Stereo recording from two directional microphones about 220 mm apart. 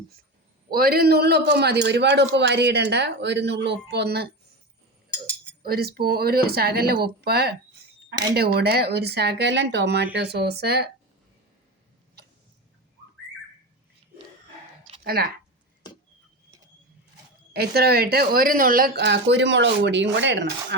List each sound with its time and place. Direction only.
0.7 s a man's voice: 45° right (ahead or behind)
5.6 s a man's voice: 45° right (ahead or behind)
15.0 s speech: 45° right (ahead or behind)
17.5 s a man's voice: 45° right (ahead or behind)